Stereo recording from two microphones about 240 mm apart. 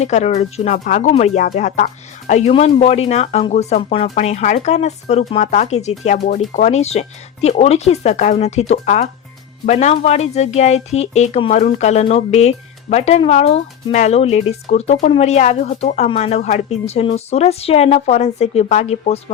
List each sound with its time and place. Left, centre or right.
0.0 s speech: left